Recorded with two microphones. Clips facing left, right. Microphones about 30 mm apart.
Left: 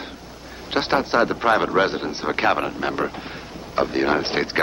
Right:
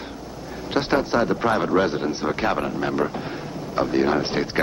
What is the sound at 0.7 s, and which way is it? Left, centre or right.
Speech, left.